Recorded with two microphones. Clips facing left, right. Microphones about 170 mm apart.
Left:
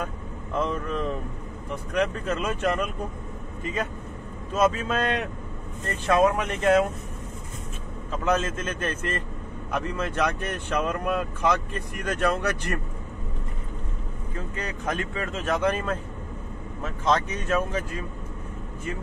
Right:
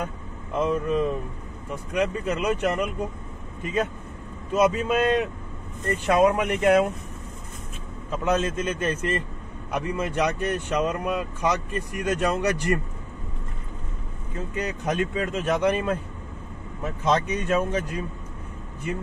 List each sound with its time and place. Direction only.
0.6 s speech: 10° right (ahead or behind)
4.6 s speech: 15° right (ahead or behind)
8.3 s speech: 15° right (ahead or behind)
14.6 s speech: 15° right (ahead or behind)